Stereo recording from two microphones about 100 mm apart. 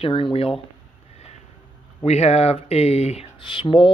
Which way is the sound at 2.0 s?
90° left.